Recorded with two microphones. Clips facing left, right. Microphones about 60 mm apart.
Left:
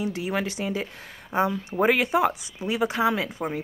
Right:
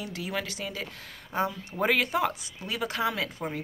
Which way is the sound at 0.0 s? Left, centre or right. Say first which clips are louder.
Left 6 dB; left.